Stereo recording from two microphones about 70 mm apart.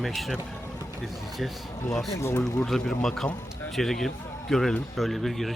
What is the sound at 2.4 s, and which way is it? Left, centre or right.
Speech, centre.